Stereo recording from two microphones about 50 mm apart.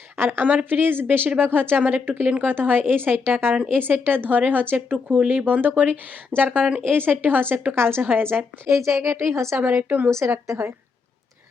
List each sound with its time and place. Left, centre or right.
0.3 s speech: right
2.2 s a woman's voice: right
2.5 s a woman's voice: right
7.8 s a woman's voice: right
8.7 s a woman's voice: right
9.6 s speech: right
10.1 s a woman's voice: right
10.4 s a woman's voice: right